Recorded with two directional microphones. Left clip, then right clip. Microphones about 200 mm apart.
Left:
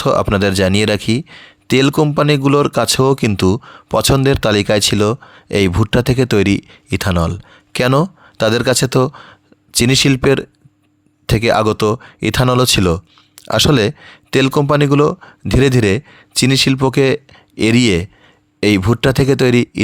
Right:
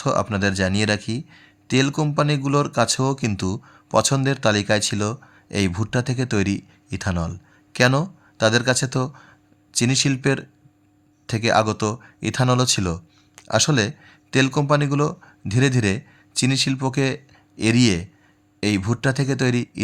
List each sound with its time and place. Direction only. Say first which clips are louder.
0.0 s speech: left 8 dB; 40° left (ahead or behind)